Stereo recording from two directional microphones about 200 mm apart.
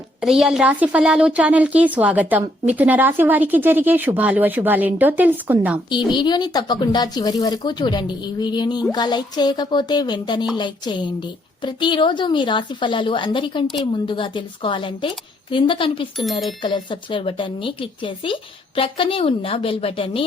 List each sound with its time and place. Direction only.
0.2 s a woman's voice: centre (ahead or behind)
6.1 s speech: 20° left (ahead or behind)